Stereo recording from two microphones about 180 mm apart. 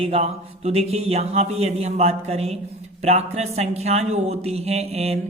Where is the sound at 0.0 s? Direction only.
35° right (ahead or behind).